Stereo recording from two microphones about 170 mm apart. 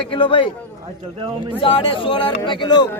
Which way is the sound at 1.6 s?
30° left (ahead or behind).